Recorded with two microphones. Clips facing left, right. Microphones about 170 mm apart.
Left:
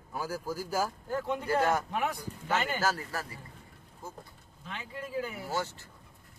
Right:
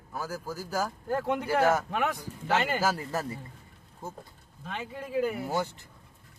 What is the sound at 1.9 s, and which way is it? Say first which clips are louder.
Speech: right 3 dB; 80° right.